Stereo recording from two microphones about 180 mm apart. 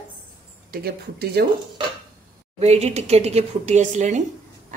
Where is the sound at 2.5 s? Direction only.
35° right (ahead or behind).